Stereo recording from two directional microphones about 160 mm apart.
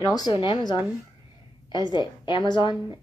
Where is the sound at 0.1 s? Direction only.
30° left (ahead or behind).